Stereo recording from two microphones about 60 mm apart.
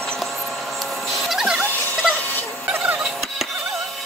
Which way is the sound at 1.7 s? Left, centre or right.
Left.